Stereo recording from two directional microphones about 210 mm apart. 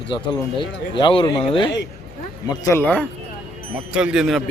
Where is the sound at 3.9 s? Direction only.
5° right (ahead or behind).